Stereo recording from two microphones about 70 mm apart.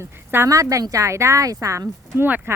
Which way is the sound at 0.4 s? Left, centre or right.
Right.